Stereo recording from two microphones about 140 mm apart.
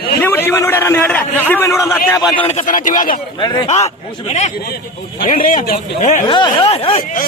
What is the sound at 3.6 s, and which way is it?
Speech, 50° left (ahead or behind).